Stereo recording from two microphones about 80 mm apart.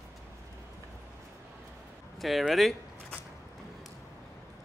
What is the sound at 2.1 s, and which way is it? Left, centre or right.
Speech, centre.